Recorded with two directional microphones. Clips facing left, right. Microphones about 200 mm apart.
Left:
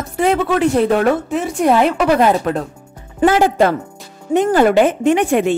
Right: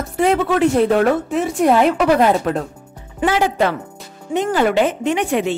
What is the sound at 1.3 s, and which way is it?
Speech, centre (ahead or behind).